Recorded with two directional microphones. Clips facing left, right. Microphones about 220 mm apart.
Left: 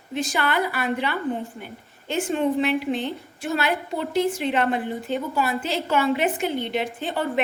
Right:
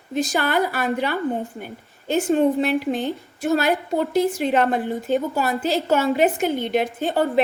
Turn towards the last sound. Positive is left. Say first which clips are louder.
# right 5 dB
turn(degrees=-40)  # may be behind; listen again after turning